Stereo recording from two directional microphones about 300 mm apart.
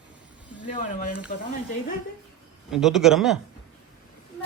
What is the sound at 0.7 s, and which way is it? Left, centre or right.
Speech, left.